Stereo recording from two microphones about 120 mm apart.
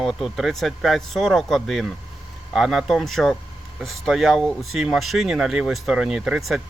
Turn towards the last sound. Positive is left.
turn(degrees=-5)  # may be behind; listen again after turning